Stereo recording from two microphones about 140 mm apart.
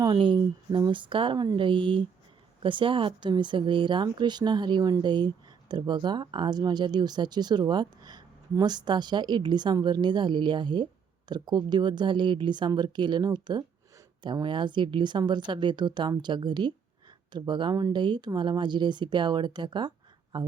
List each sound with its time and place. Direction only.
0.0 s speech: 35° right (ahead or behind)